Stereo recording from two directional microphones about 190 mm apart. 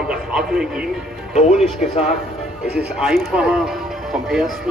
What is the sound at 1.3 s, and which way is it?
Speech, 40° left (ahead or behind).